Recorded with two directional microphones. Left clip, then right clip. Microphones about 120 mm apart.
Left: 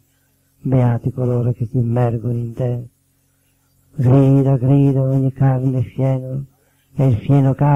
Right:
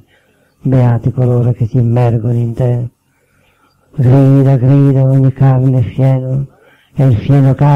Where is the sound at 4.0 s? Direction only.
20° left (ahead or behind).